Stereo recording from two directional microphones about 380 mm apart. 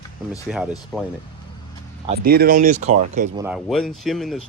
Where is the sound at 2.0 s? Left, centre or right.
Right.